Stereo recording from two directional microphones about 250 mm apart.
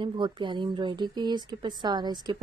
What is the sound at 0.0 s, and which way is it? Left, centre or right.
Speech, centre.